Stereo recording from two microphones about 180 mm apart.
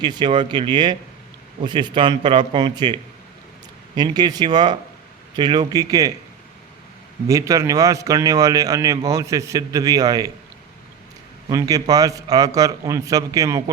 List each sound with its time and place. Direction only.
0.0 s a man's voice: 25° right (ahead or behind)
7.3 s a man's voice: 15° right (ahead or behind)
11.4 s a man's voice: 20° right (ahead or behind)